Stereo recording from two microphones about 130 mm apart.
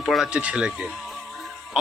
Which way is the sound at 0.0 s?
Centre (ahead or behind).